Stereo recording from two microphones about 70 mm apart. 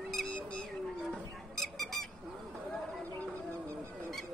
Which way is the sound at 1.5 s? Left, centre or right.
Centre.